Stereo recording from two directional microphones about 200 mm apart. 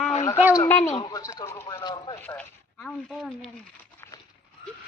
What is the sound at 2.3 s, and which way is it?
Speech, 5° left (ahead or behind).